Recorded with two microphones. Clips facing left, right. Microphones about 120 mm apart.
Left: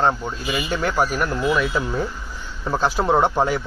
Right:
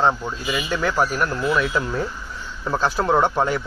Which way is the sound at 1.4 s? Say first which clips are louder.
Left 1 dB; 5° left (ahead or behind).